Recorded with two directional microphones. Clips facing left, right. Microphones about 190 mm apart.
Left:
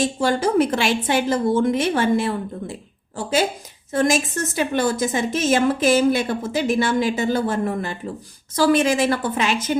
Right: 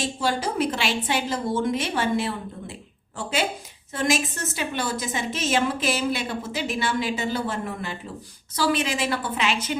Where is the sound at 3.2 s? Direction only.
40° left (ahead or behind).